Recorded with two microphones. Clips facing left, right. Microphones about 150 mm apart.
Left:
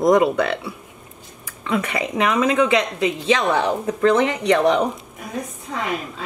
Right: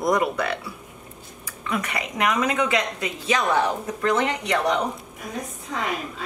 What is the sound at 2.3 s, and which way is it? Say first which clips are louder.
Speech: left 6 dB; 30° left (ahead or behind).